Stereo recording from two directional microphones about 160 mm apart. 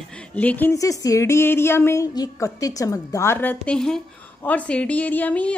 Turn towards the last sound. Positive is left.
turn(degrees=10)  # may be behind; listen again after turning